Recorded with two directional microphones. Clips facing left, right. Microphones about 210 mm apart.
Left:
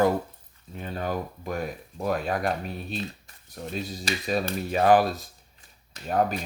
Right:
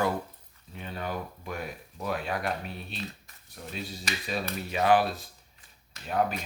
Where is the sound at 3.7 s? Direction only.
40° left (ahead or behind).